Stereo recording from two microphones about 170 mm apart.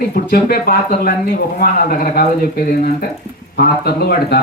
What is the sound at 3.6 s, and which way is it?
Speech, 65° left (ahead or behind).